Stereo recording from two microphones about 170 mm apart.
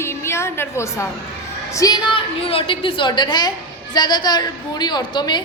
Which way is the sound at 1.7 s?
20° left (ahead or behind).